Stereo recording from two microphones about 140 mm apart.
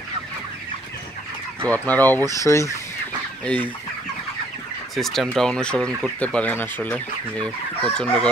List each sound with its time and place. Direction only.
1.7 s speech: 10° left (ahead or behind)
4.9 s speech: centre (ahead or behind)